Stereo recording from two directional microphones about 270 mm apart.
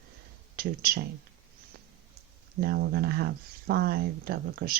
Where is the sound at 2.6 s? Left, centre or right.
Right.